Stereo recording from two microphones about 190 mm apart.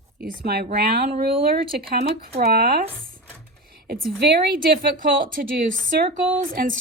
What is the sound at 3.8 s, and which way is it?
A woman's voice, 50° right (ahead or behind).